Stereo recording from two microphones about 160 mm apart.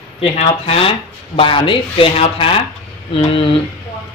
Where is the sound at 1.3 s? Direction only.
35° left (ahead or behind).